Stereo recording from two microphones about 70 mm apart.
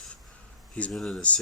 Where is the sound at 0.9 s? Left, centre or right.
Centre.